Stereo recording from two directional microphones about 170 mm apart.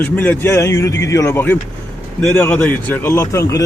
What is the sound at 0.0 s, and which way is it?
Speech, 10° left (ahead or behind).